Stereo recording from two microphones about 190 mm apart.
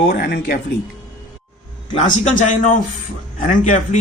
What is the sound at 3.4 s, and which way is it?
Speech, 40° left (ahead or behind).